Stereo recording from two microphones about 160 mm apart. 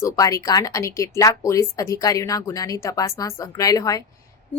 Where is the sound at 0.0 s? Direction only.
20° left (ahead or behind).